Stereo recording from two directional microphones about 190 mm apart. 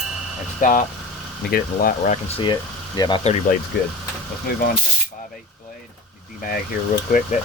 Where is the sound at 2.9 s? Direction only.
20° left (ahead or behind).